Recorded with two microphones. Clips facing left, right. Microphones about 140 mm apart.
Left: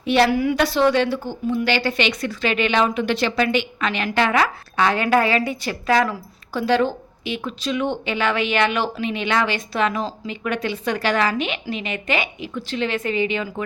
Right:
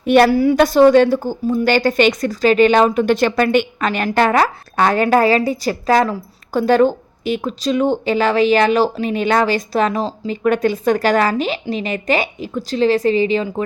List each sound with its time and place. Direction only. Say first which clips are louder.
0.0 s a woman's voice: right 6 dB; 50° right (ahead or behind)
0.3 s a woman's voice: right 6 dB; 35° right (ahead or behind)
6.5 s a woman's voice: right 6 dB; 45° right (ahead or behind)